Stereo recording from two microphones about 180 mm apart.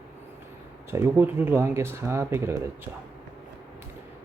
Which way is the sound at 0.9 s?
10° right (ahead or behind).